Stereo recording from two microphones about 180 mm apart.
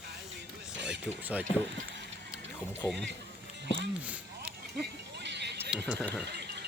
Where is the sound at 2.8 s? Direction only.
5° left (ahead or behind).